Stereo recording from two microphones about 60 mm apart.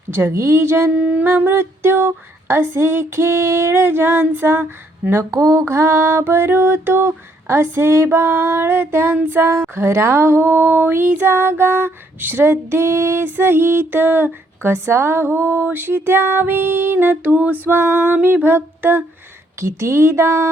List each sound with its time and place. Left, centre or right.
0.1 s a woman's voice: right
0.3 s female singing: right
0.9 s a sound: right
2.5 s female singing: right
5.3 s female singing: right
7.4 s female singing: right
9.4 s a sound: right
19.5 s female singing: right